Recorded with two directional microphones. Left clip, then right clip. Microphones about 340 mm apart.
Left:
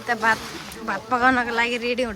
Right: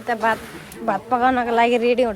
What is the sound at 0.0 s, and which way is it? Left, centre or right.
Speech, centre.